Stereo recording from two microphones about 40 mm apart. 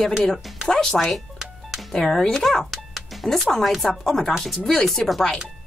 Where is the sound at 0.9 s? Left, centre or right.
Centre.